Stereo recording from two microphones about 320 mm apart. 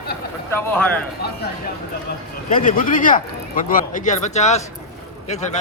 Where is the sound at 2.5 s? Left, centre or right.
Left.